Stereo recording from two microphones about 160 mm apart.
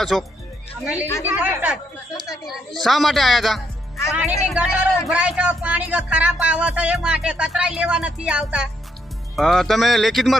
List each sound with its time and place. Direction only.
0.0 s speech: centre (ahead or behind)
1.0 s a woman's voice: 20° left (ahead or behind)
1.3 s speech: 10° right (ahead or behind)
2.1 s a woman's voice: 20° left (ahead or behind)
2.8 s speech: centre (ahead or behind)